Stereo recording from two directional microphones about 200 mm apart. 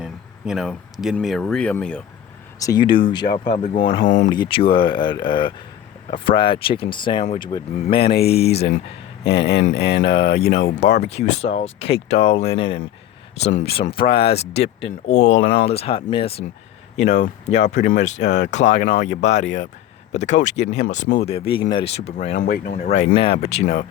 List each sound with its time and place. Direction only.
0.0 s speech: centre (ahead or behind)
2.6 s speech: 20° left (ahead or behind)
3.5 s speech: 40° left (ahead or behind)
4.3 s speech: 25° left (ahead or behind)
22.5 s speech: 45° left (ahead or behind)
23.1 s speech: 25° left (ahead or behind)